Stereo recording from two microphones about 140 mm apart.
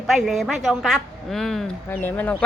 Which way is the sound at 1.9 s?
15° left (ahead or behind).